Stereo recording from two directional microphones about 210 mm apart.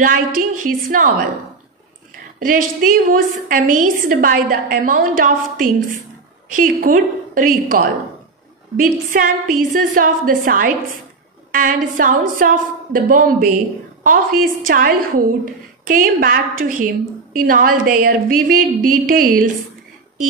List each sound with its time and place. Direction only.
0.0 s a woman's voice: 40° right (ahead or behind)
2.4 s a woman's voice: 40° right (ahead or behind)